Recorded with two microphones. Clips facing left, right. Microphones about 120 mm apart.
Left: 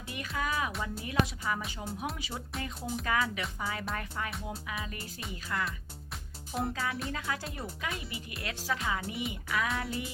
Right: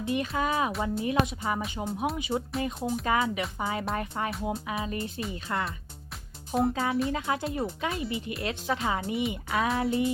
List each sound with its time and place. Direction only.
0.0 s speech: 25° right (ahead or behind)
5.5 s speech: 40° right (ahead or behind)
6.5 s a child's voice: centre (ahead or behind)
6.7 s speech: 30° right (ahead or behind)